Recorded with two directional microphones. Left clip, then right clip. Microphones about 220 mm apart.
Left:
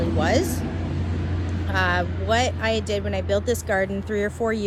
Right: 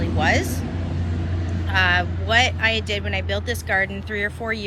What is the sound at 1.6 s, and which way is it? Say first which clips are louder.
Speech: right 4 dB; 15° left (ahead or behind).